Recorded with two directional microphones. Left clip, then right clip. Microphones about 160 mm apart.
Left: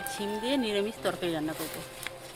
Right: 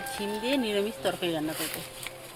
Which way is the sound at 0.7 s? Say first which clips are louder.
Right 1 dB; 25° right (ahead or behind).